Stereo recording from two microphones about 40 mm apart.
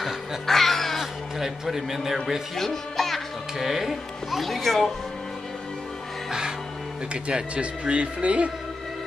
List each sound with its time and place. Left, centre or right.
0.5 s crow: centre
1.4 s speech: centre
2.5 s speech: centre
3.5 s speech: centre
7.2 s speech: right